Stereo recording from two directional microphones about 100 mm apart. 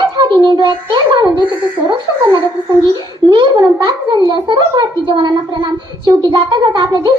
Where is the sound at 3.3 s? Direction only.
45° right (ahead or behind).